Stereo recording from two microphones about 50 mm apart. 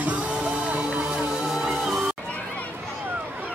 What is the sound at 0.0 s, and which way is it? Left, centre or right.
Music, right.